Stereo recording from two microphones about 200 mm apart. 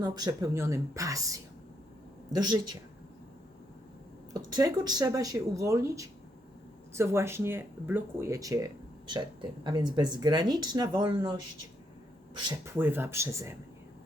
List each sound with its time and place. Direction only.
0.0 s speech: 20° right (ahead or behind)
4.4 s speech: 20° right (ahead or behind)
12.5 s speech: 10° right (ahead or behind)